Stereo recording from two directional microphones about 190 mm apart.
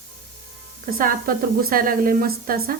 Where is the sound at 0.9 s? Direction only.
50° right (ahead or behind).